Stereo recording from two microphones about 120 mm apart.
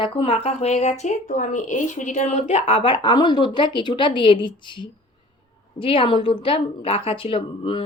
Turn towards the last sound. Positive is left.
turn(degrees=45)  # may be behind; listen again after turning